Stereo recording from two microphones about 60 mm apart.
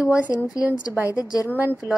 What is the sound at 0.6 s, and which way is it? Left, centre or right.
Speech, right.